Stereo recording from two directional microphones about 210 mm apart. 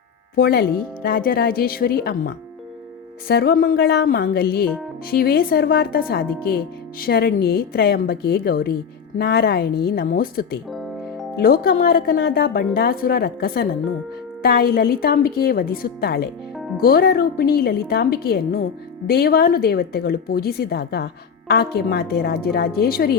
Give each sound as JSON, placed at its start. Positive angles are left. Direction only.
{"t": 0.3, "sound": "a woman's voice", "side_deg": 45}